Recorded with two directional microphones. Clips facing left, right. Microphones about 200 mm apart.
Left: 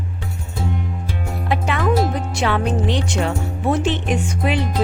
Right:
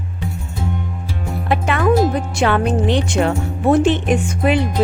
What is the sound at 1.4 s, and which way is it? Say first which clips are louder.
Music: right 3 dB; 55° right (ahead or behind).